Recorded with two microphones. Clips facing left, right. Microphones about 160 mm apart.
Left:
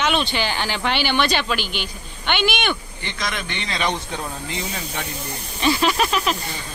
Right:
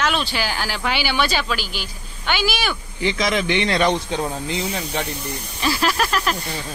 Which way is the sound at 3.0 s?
90° right.